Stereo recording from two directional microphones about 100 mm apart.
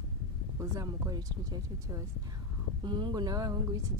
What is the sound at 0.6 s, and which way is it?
Speech, 35° right (ahead or behind).